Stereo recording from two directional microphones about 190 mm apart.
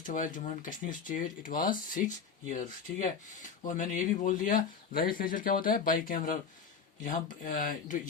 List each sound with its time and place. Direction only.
0.0 s speech: 45° left (ahead or behind)